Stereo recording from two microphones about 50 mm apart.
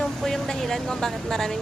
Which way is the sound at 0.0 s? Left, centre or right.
Centre.